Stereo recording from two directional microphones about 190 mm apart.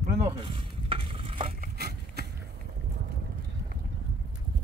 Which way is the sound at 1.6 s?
55° right (ahead or behind).